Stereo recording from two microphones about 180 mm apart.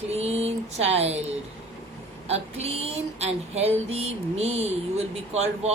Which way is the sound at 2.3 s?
35° right (ahead or behind).